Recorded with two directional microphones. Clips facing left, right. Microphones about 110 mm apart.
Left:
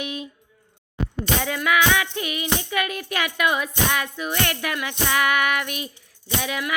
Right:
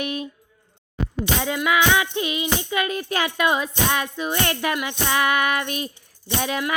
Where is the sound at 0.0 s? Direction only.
50° right (ahead or behind).